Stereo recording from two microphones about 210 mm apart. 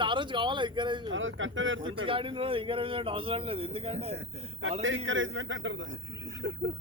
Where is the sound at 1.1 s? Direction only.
65° right (ahead or behind).